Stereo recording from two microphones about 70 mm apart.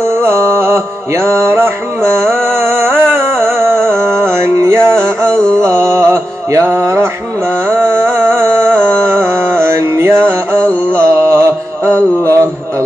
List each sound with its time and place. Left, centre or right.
0.0 s music: right
2.4 s a sound: right
5.5 s mantra: right
7.7 s music: right
8.8 s mantra: right